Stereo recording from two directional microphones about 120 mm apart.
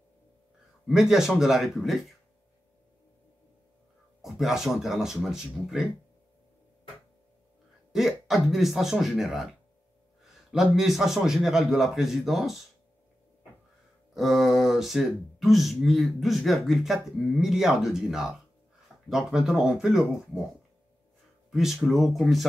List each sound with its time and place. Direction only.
0.8 s speech: 5° right (ahead or behind)
4.2 s speech: centre (ahead or behind)
7.9 s speech: centre (ahead or behind)
14.1 s speech: centre (ahead or behind)
21.5 s speech: centre (ahead or behind)